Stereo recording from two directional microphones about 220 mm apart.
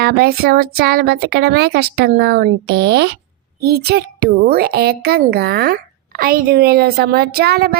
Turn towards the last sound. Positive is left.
turn(degrees=-45)  # may be behind; listen again after turning